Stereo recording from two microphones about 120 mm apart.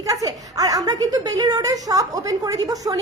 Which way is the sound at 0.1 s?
30° right (ahead or behind).